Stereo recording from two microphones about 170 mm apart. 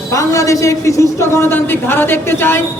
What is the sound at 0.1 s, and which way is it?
A man's voice, 20° left (ahead or behind).